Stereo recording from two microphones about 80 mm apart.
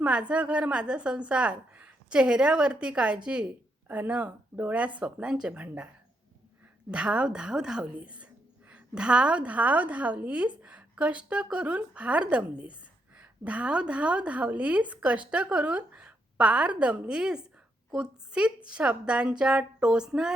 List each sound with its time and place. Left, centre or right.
0.0 s a woman's voice: centre
6.9 s a woman's voice: centre